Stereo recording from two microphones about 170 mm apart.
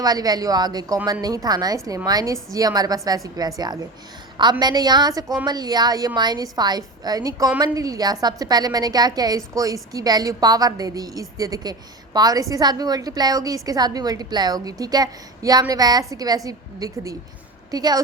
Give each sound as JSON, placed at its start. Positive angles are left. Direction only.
{"t": 0.0, "sound": "a woman's voice", "side_deg": -20}